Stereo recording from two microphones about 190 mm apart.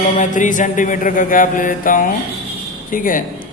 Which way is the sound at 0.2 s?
40° left (ahead or behind).